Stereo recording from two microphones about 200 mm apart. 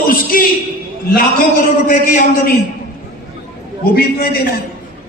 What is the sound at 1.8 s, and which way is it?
Speech, 40° left (ahead or behind).